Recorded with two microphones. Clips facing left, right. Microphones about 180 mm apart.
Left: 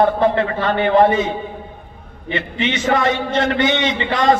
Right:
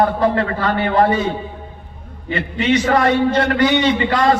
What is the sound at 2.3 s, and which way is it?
A man's voice, 25° left (ahead or behind).